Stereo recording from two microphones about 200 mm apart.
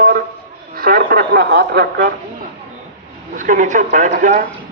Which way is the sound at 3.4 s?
40° right (ahead or behind).